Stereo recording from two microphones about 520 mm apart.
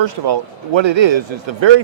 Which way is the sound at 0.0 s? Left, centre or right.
Right.